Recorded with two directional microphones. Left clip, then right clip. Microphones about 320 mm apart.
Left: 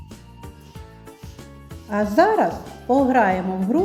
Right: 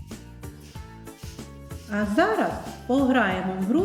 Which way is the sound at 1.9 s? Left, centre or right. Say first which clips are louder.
Left 6 dB; centre.